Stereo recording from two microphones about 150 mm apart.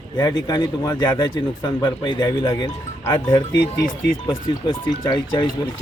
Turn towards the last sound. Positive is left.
turn(degrees=30)  # may be behind; listen again after turning